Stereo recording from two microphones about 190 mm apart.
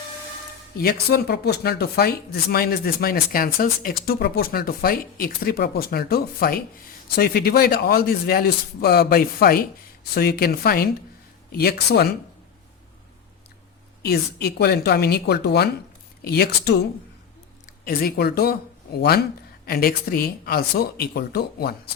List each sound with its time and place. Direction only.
0.8 s a woman's voice: 55° left (ahead or behind)
14.0 s a woman's voice: 55° left (ahead or behind)
17.8 s a woman's voice: 55° left (ahead or behind)